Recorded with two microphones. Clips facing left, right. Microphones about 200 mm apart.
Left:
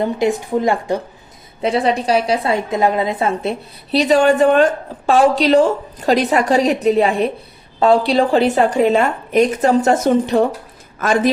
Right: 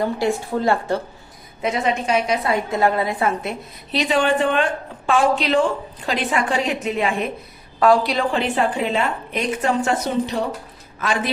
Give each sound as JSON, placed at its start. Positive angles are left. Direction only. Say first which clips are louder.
{"t": 0.0, "sound": "a woman's voice", "louder": "left 4 dB", "side_deg": 20}
{"t": 1.6, "sound": "a woman's voice", "louder": "left 5 dB", "side_deg": 35}
{"t": 3.9, "sound": "a woman's voice", "louder": "left 6 dB", "side_deg": 40}